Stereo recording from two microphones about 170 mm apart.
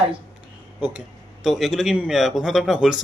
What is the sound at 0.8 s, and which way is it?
Speech, 10° right (ahead or behind).